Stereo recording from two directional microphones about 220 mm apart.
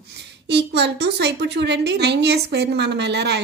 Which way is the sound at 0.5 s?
50° right (ahead or behind).